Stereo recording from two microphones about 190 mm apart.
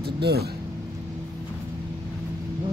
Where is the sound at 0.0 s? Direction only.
55° right (ahead or behind).